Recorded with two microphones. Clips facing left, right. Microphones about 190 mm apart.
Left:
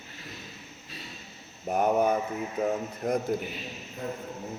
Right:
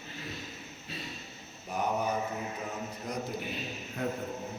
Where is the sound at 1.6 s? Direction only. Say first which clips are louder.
Left 7 dB; 55° left (ahead or behind).